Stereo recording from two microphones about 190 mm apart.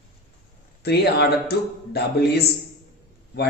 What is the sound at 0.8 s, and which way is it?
A man's voice, 55° left (ahead or behind).